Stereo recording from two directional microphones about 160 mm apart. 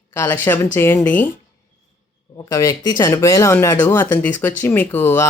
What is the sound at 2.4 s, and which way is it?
Speech, 20° left (ahead or behind).